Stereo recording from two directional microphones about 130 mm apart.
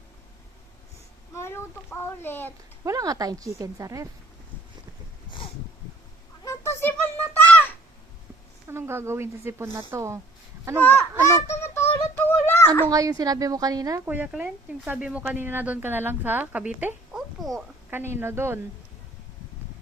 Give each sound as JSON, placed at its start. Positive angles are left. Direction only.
{"t": 1.4, "sound": "a sound", "side_deg": 20}
{"t": 2.8, "sound": "speech", "side_deg": -30}
{"t": 6.4, "sound": "a sound", "side_deg": 20}
{"t": 8.6, "sound": "speech", "side_deg": -20}
{"t": 10.8, "sound": "honk", "side_deg": 15}
{"t": 11.4, "sound": "a sound", "side_deg": 20}
{"t": 12.9, "sound": "speech", "side_deg": -30}
{"t": 14.0, "sound": "speech", "side_deg": -15}
{"t": 17.9, "sound": "speech", "side_deg": -20}